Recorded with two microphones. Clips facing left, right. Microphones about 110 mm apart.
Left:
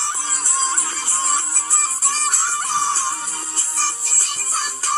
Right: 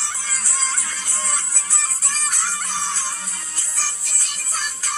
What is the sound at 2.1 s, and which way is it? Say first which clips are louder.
Music: left 4 dB; 40° left (ahead or behind).